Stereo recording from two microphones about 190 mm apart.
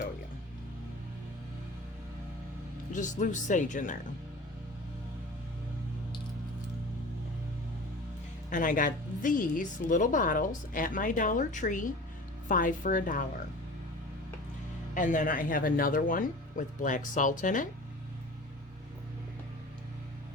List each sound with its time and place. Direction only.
2.9 s speech: 40° left (ahead or behind)
8.4 s a woman's voice: 45° left (ahead or behind)
14.9 s a woman's voice: 45° left (ahead or behind)